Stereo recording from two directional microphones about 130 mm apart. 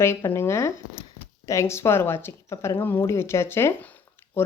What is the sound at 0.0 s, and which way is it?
Speech, 20° left (ahead or behind).